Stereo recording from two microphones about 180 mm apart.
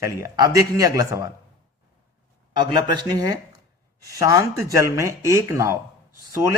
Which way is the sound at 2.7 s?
25° right (ahead or behind).